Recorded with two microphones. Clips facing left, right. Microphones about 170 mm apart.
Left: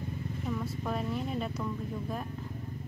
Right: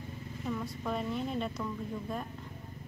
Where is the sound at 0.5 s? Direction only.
Centre (ahead or behind).